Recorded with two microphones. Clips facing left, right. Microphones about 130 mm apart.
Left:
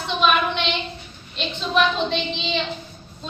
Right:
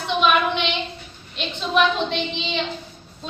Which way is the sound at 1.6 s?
10° right (ahead or behind).